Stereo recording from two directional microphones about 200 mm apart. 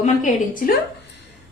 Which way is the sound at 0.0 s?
40° left (ahead or behind).